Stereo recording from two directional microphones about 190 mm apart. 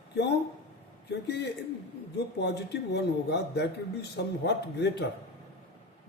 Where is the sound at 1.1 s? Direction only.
60° left (ahead or behind).